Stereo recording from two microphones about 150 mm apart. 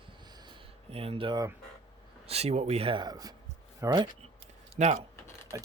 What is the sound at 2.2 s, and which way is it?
Speech, 45° right (ahead or behind).